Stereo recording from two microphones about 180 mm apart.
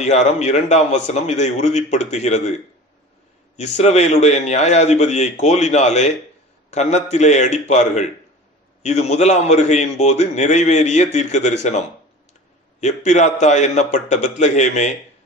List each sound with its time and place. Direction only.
0.0 s a man's voice: 40° left (ahead or behind)
3.5 s a man's voice: 40° left (ahead or behind)
12.8 s a man's voice: 40° left (ahead or behind)